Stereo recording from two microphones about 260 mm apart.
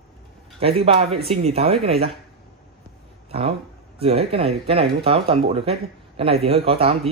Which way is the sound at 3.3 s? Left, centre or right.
Right.